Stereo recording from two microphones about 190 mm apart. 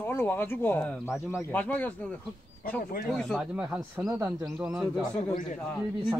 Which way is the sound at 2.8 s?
50° left (ahead or behind).